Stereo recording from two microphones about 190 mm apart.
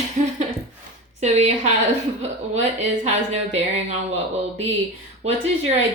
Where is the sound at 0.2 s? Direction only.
35° right (ahead or behind).